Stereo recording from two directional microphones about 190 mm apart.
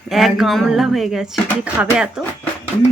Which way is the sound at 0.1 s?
Centre (ahead or behind).